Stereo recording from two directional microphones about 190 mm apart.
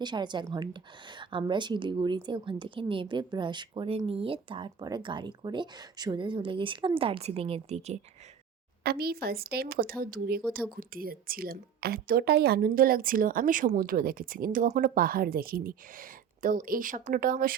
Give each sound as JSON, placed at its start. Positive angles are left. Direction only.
{"t": 0.0, "sound": "a woman's voice", "side_deg": -25}
{"t": 8.8, "sound": "a woman's voice", "side_deg": -55}